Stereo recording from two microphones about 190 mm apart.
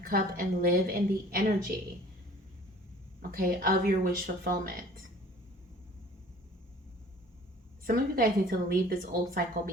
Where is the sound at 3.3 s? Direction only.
45° right (ahead or behind).